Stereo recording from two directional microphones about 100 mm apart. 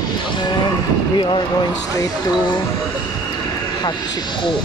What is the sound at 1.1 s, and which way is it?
Speech, 55° left (ahead or behind).